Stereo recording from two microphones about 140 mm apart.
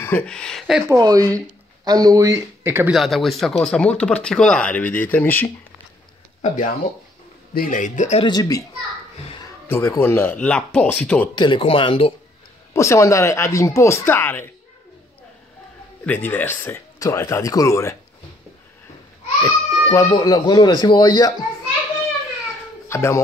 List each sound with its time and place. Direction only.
0.0 s speech: 10° left (ahead or behind)
0.8 s speech: 25° right (ahead or behind)
2.9 s speech: centre (ahead or behind)
6.4 s speech: 60° left (ahead or behind)
7.5 s a man's voice: 80° left; by 8.2 s 60° left (ahead or behind)
8.2 s speech: 30° left (ahead or behind)
9.7 s speech: 20° left (ahead or behind)
11.3 s speech: 35° left (ahead or behind)
12.7 s speech: 20° left (ahead or behind)
16.1 s speech: 15° left (ahead or behind)
19.4 s speech: 30° left (ahead or behind)
22.8 s speech: 20° left (ahead or behind)